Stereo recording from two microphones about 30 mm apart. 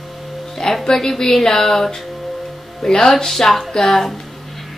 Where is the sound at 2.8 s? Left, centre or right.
Left.